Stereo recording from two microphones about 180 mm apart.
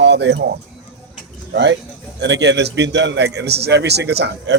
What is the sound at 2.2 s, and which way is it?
A man's voice, 75° right (ahead or behind).